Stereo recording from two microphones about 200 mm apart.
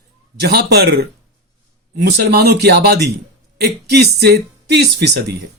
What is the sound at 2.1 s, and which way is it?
Speech, 55° right (ahead or behind).